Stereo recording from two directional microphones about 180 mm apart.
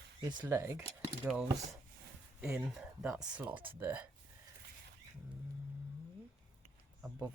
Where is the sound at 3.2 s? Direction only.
10° right (ahead or behind).